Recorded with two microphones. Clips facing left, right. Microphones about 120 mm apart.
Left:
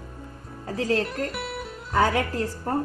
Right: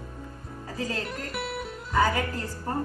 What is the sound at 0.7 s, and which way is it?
Speech, 70° left (ahead or behind).